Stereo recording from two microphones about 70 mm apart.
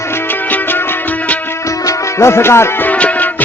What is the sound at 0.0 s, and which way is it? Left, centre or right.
Music, left.